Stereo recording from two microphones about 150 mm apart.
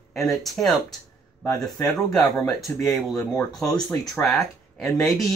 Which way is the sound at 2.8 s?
15° left (ahead or behind).